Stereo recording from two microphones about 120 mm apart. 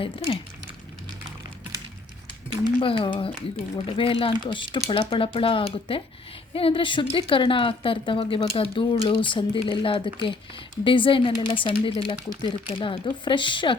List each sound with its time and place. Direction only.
0.0 s a woman's voice: 50° left (ahead or behind)
2.8 s a woman's voice: 45° left (ahead or behind)